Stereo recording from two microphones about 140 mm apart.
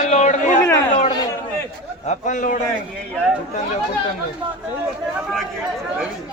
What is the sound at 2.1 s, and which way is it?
Speech, 65° left (ahead or behind).